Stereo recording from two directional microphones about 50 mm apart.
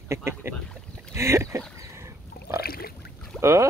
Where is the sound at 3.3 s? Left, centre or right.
Right.